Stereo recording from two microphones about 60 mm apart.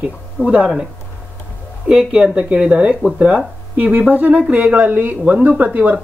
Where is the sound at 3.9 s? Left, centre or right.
Right.